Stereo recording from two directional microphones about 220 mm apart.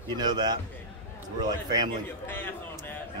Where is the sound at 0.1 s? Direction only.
20° right (ahead or behind).